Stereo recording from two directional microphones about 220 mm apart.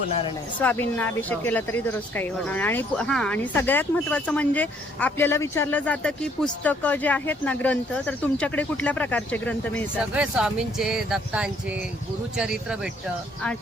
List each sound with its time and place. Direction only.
0.1 s speech: 25° left (ahead or behind)
0.6 s speech: 10° left (ahead or behind)
10.0 s speech: 5° right (ahead or behind)